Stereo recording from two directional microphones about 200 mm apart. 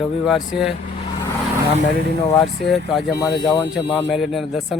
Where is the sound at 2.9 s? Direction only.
Centre (ahead or behind).